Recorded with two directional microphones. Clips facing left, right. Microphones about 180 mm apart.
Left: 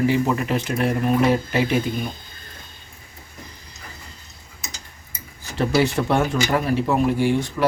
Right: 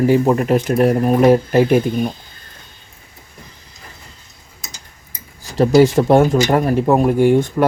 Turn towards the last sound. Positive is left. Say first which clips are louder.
# right 7 dB
turn(degrees=-50)  # may be behind; listen again after turning